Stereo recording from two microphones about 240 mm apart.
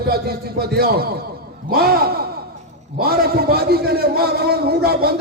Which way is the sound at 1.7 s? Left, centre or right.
Right.